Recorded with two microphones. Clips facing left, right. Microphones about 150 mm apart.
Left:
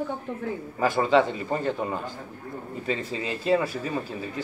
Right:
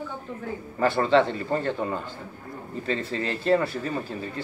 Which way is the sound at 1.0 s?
10° left (ahead or behind).